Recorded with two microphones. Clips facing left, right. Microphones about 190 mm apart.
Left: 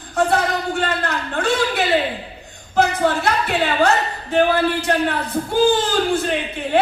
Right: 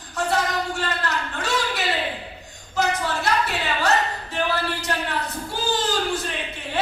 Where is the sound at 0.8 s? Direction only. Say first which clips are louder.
Left 4 dB; 55° left (ahead or behind).